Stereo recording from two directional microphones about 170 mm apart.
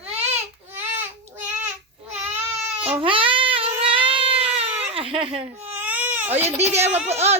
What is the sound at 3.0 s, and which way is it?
Child singing, 30° right (ahead or behind).